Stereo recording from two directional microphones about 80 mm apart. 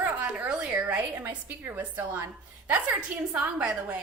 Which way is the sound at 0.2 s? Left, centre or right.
Centre.